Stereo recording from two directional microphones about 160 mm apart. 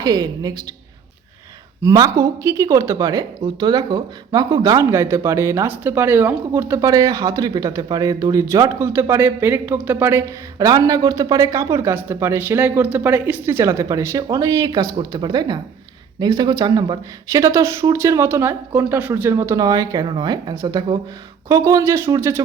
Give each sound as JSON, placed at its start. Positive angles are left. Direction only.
{"t": 0.0, "sound": "speech", "side_deg": -25}
{"t": 1.8, "sound": "speech", "side_deg": -20}